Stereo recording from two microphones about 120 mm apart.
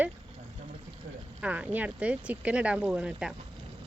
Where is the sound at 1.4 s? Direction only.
10° right (ahead or behind).